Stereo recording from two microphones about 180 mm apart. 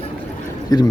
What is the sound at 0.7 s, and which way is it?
Speech, 20° left (ahead or behind).